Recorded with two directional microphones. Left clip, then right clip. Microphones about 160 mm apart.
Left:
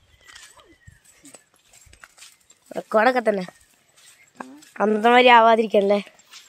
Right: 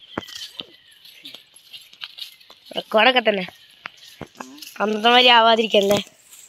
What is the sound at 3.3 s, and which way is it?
Speech, 15° left (ahead or behind).